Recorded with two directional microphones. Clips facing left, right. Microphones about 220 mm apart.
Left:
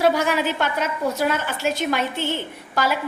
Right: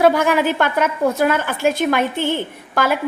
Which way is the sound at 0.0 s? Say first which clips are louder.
Right 5 dB; 55° right (ahead or behind).